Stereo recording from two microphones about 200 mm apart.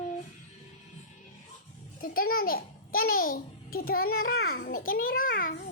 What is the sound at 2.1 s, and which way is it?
A child's voice, 50° left (ahead or behind).